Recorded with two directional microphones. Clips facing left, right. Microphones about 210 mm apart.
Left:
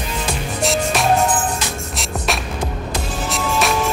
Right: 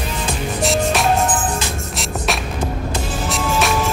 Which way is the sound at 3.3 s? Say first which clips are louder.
Even; centre (ahead or behind).